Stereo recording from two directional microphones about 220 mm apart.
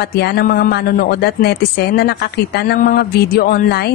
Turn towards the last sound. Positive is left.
turn(degrees=45)  # may be behind; listen again after turning